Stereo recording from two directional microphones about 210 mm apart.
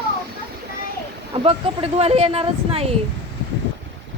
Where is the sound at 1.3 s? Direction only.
25° right (ahead or behind).